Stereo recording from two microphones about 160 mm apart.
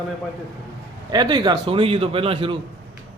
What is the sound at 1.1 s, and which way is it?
A man's voice, 25° right (ahead or behind).